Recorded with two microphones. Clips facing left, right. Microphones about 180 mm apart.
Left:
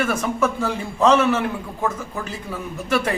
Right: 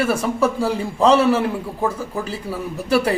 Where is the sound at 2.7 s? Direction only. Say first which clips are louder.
Right 4 dB; 35° right (ahead or behind).